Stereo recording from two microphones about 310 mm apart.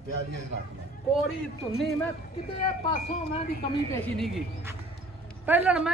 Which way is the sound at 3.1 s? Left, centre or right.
Left.